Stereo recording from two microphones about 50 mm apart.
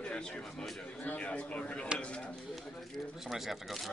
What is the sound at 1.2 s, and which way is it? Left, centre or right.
Speech, left.